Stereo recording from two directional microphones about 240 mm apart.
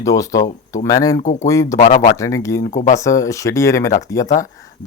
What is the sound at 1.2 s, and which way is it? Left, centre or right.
Speech, left.